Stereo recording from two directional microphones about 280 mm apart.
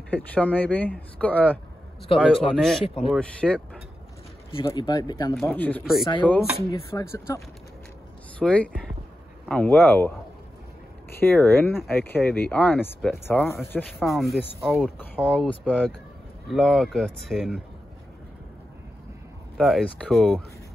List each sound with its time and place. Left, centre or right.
0.1 s speech: centre
2.8 s speech: centre
3.1 s speech: centre
4.5 s speech: centre
5.3 s speech: centre
19.5 s speech: centre